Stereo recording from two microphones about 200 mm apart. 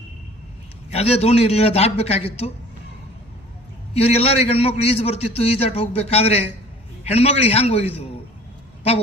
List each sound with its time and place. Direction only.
0.9 s a man's voice: 30° left (ahead or behind)
3.9 s a man's voice: 30° left (ahead or behind)